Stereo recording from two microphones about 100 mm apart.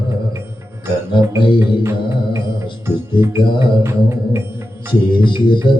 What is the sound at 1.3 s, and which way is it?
Music, 55° left (ahead or behind).